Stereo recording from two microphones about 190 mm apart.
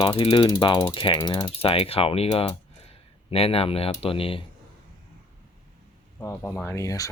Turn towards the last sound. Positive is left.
turn(degrees=15)  # may be behind; listen again after turning